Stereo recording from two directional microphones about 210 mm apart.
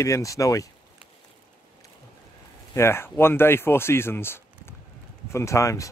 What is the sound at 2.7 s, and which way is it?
Speech, 10° left (ahead or behind).